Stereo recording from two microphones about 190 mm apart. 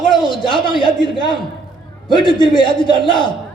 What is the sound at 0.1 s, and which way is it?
A man's voice, 25° left (ahead or behind).